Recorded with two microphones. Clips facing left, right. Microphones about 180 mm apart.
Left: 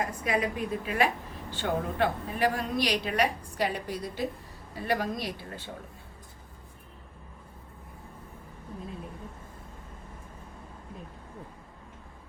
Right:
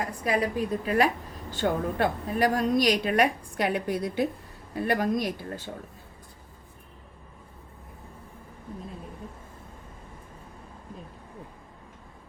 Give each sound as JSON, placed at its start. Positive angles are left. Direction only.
{"t": 0.3, "sound": "a woman's voice", "side_deg": -40}